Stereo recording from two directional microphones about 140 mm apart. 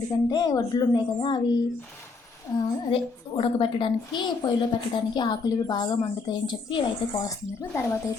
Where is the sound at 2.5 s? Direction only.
25° left (ahead or behind).